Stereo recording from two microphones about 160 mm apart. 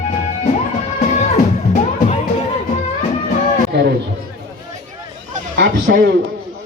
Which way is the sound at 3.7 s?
90° right.